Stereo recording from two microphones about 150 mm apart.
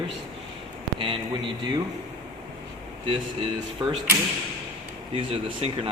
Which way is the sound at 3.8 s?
30° right (ahead or behind).